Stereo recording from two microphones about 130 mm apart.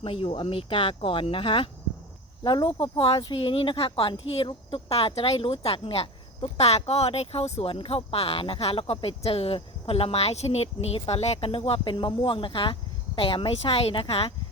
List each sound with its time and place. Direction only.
0.0 s speech: 45° left (ahead or behind)